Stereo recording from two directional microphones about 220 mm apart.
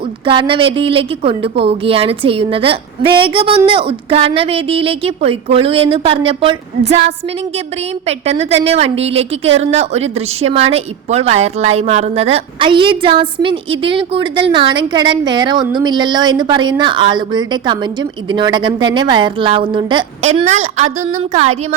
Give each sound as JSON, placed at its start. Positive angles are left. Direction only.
{"t": 0.3, "sound": "a woman's voice", "side_deg": -25}
{"t": 8.0, "sound": "a woman's voice", "side_deg": -30}